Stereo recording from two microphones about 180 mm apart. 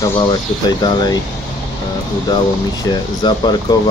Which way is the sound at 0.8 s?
25° left (ahead or behind).